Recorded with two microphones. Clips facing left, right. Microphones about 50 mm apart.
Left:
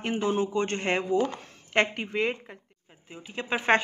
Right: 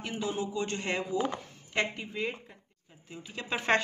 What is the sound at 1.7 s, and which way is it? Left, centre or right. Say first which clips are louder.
Speech: left 6 dB; left.